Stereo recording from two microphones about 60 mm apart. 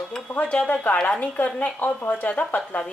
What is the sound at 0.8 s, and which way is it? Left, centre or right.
Speech, left.